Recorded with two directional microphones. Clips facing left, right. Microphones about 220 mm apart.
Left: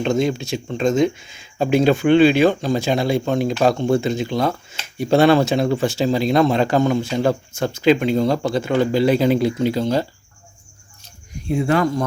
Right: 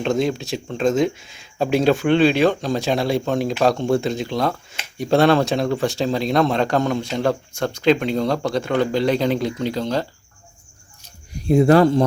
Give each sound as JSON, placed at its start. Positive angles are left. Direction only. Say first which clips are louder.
{"t": 0.0, "sound": "speech", "louder": "left 1 dB", "side_deg": 0}
{"t": 11.4, "sound": "speech", "louder": "right 5 dB", "side_deg": -40}